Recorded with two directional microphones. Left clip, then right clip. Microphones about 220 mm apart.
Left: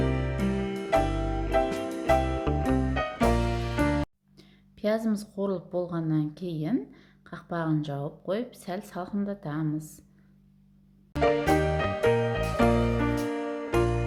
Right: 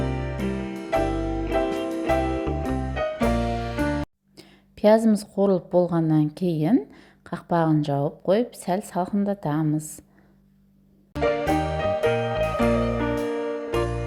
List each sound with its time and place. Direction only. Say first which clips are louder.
0.0 s music: right 1 dB; centre (ahead or behind)
4.4 s a woman's voice: right 11 dB; 35° right (ahead or behind)
11.1 s music: right 1 dB; centre (ahead or behind)